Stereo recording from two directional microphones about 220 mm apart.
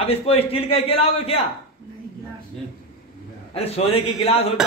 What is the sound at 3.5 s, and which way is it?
Speech, 25° left (ahead or behind).